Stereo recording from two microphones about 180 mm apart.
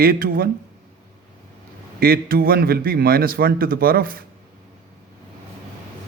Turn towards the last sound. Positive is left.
turn(degrees=-55)  # may be behind; listen again after turning